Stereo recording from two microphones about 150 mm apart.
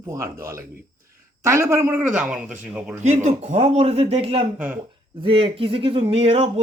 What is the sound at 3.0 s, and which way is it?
Speech, 50° right (ahead or behind).